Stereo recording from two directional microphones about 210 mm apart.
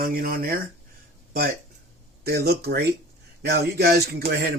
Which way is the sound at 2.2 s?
50° right (ahead or behind).